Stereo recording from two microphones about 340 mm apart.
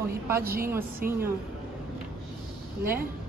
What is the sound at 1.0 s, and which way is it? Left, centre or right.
Speech, right.